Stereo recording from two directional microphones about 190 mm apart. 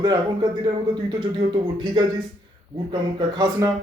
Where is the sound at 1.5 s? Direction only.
25° right (ahead or behind).